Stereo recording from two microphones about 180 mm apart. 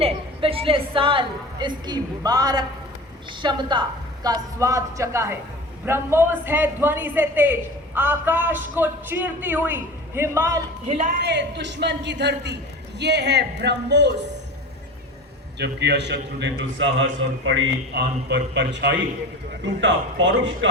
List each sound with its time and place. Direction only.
0.0 s a woman's voice: 30° right (ahead or behind); by 10.6 s 15° right (ahead or behind)
11.2 s a man's voice: 70° right (ahead or behind)
15.5 s a man's voice: 70° right (ahead or behind)
19.6 s speech: 90° right